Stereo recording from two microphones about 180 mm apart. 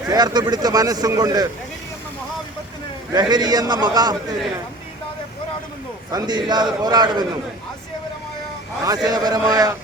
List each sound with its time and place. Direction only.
0.1 s a man's voice: 20° right (ahead or behind)
3.1 s a man's voice: 20° right (ahead or behind)
6.1 s a man's voice: 20° right (ahead or behind)
9.0 s a man's voice: 20° right (ahead or behind)